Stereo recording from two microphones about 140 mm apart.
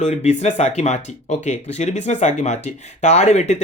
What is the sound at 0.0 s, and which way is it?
Speech, 50° left (ahead or behind).